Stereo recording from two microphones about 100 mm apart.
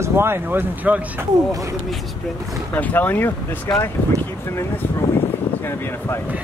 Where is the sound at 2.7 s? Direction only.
15° left (ahead or behind).